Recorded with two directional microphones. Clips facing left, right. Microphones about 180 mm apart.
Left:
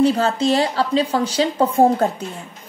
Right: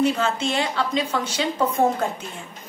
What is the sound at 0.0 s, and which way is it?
A woman's voice, 35° left (ahead or behind).